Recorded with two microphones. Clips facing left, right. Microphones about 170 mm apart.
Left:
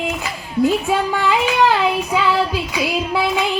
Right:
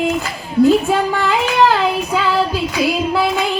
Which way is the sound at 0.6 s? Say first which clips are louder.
Right 5 dB; 65° right (ahead or behind).